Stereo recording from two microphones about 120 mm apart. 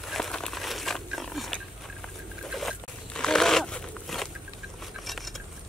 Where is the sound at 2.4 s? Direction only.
Centre (ahead or behind).